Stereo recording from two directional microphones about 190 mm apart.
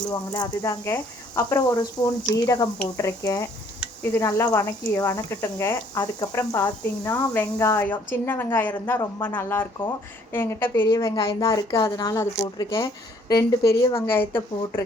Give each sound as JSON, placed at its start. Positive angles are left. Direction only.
{"t": 0.1, "sound": "speech", "side_deg": 15}